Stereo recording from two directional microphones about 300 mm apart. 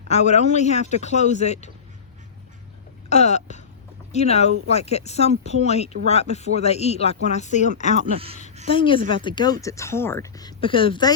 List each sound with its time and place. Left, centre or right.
0.1 s speech: left
3.1 s a sound: left
4.1 s speech: left
8.1 s speech: centre
8.7 s speech: centre